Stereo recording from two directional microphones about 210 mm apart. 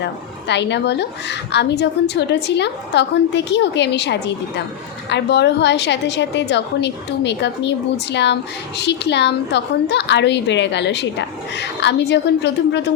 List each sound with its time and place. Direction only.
0.0 s a woman's voice: 55° left (ahead or behind)